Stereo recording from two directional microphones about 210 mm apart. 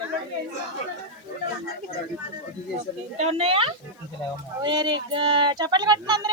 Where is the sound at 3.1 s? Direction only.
30° right (ahead or behind).